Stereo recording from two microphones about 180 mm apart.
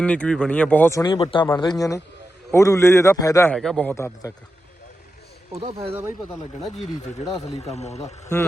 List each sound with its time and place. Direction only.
0.0 s a man's voice: 5° left (ahead or behind)
3.5 s speech: 5° left (ahead or behind)
5.5 s speech: 35° right (ahead or behind)
7.4 s speech: 35° left (ahead or behind)